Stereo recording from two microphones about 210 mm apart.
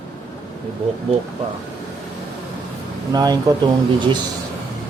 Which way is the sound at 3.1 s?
20° right (ahead or behind).